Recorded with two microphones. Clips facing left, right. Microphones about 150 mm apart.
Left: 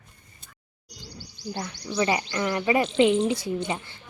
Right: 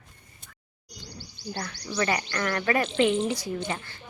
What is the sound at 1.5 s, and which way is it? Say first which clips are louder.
Speech: left 2 dB; 20° left (ahead or behind).